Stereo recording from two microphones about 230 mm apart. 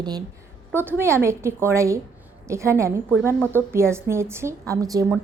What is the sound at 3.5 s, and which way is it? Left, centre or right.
A woman's voice, centre.